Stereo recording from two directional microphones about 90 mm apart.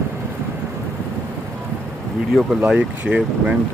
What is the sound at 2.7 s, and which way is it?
Speech, 15° right (ahead or behind).